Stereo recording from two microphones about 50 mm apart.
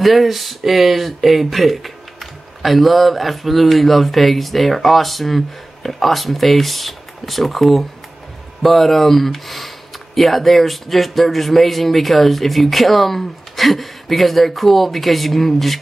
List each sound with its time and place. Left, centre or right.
0.0 s speech: centre